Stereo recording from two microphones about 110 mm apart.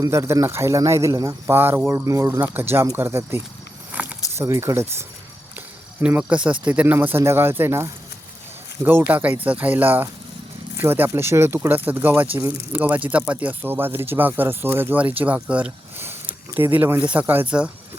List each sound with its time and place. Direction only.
0.0 s speech: 25° right (ahead or behind)
2.0 s speech: 30° right (ahead or behind)
3.9 s keys jangling: 15° right (ahead or behind)
4.4 s speech: 25° right (ahead or behind)